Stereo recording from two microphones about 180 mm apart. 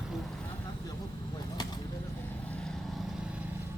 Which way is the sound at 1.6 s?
25° left (ahead or behind).